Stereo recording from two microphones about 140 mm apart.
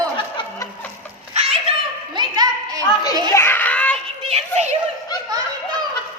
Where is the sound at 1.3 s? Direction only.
45° right (ahead or behind).